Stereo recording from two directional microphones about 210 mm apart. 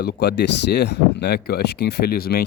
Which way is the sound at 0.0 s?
50° left (ahead or behind).